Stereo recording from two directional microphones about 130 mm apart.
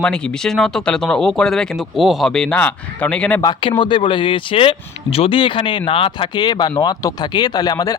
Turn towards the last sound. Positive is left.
turn(degrees=30)  # may be behind; listen again after turning